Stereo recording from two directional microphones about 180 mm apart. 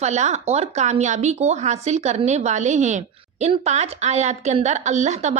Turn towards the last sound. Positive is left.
turn(degrees=-40)  # may be behind; listen again after turning